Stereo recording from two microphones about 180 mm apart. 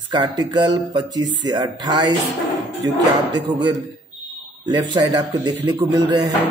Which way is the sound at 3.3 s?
25° right (ahead or behind).